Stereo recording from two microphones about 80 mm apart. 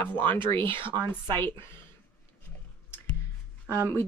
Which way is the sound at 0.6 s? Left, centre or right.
Right.